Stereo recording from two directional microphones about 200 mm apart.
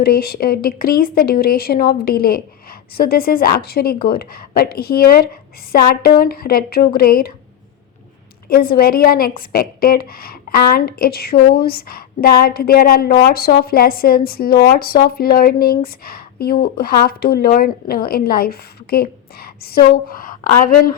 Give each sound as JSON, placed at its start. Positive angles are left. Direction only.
{"t": 0.0, "sound": "a woman's voice", "side_deg": 50}
{"t": 8.4, "sound": "a woman's voice", "side_deg": 50}